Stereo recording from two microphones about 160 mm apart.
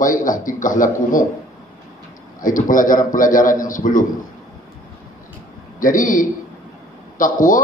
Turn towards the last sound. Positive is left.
turn(degrees=55)  # may be behind; listen again after turning